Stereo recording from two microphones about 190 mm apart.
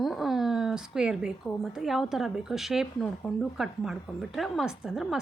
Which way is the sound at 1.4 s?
Centre (ahead or behind).